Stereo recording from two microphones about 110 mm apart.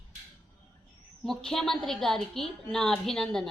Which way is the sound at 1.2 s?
5° left (ahead or behind).